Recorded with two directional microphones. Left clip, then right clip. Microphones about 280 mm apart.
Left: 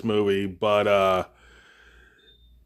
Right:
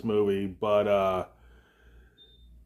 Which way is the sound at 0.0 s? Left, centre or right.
Left.